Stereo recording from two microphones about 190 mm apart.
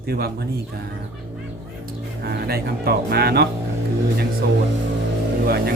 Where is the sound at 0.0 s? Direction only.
55° right (ahead or behind).